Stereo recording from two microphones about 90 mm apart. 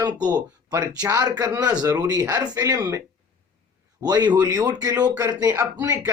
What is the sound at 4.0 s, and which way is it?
Speech, 50° right (ahead or behind).